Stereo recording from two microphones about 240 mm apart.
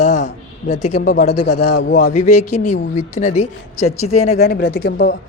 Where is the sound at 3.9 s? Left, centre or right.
Left.